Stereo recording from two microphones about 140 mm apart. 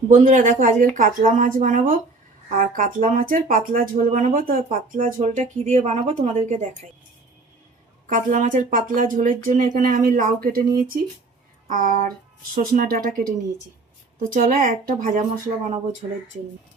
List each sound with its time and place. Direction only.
0.1 s speech: 65° right (ahead or behind)
5.2 s speech: 60° right (ahead or behind)
8.0 s speech: 65° right (ahead or behind); by 10.7 s 90° right
11.7 s speech: 75° right (ahead or behind); by 15.8 s 55° right (ahead or behind)